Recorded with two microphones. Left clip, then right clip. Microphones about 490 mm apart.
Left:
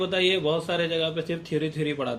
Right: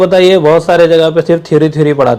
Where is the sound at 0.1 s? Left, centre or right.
Right.